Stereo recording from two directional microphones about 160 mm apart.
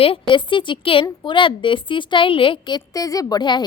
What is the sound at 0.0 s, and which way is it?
A woman's voice, 35° left (ahead or behind).